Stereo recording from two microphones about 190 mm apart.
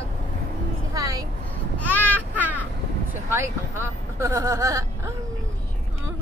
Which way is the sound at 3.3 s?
15° right (ahead or behind).